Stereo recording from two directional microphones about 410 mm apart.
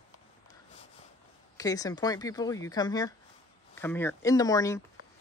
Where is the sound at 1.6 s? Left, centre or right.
Centre.